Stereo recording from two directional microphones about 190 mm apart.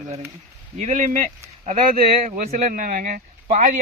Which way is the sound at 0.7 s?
40° right (ahead or behind).